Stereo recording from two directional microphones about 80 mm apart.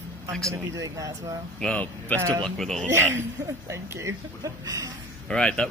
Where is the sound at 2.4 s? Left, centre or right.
Centre.